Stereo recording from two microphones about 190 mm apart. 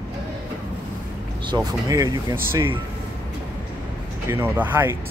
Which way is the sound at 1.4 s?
20° right (ahead or behind).